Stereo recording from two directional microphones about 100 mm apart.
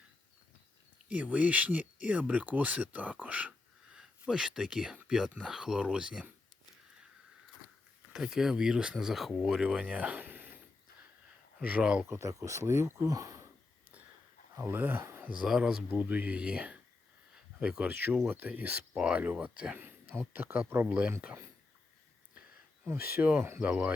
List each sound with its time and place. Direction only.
1.0 s speech: 15° right (ahead or behind)
8.1 s speech: 5° right (ahead or behind)
9.6 s speech: 10° right (ahead or behind)
11.6 s speech: 10° right (ahead or behind)
12.0 s speech: 30° right (ahead or behind)
14.5 s speech: 25° right (ahead or behind)
15.4 s speech: 5° right (ahead or behind)
15.9 s speech: 15° right (ahead or behind)
18.9 s speech: 5° right (ahead or behind); by 20.8 s 20° right (ahead or behind)
20.8 s speech: 10° right (ahead or behind)
21.1 s speech: 20° right (ahead or behind)
22.9 s speech: 20° right (ahead or behind)